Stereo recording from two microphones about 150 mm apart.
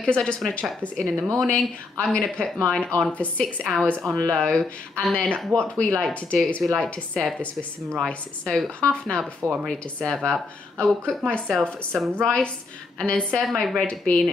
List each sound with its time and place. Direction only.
0.0 s a woman's voice: 5° left (ahead or behind)
5.5 s speech: 20° right (ahead or behind)
6.4 s speech: centre (ahead or behind)
9.4 s speech: 10° right (ahead or behind)
9.7 s a woman's voice: 5° left (ahead or behind)